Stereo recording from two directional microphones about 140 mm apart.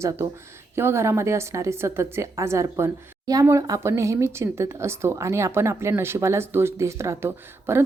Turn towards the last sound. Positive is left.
turn(degrees=-15)  # may be behind; listen again after turning